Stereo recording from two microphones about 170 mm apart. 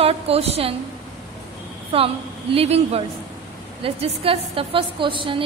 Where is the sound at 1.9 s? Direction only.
35° right (ahead or behind).